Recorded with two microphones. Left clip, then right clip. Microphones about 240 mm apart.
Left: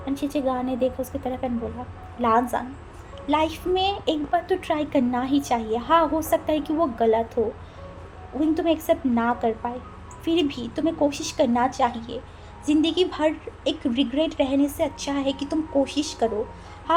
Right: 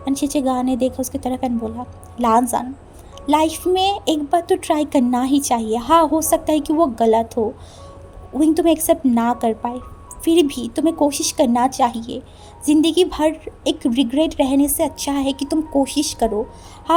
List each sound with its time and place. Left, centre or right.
0.0 s a woman's voice: right